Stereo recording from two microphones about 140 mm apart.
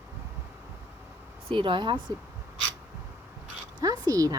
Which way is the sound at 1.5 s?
35° right (ahead or behind).